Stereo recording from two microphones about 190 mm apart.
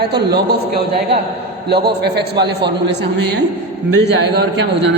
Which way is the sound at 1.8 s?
60° right (ahead or behind).